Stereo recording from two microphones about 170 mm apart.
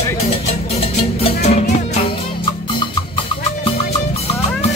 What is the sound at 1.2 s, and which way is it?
Music, 40° left (ahead or behind).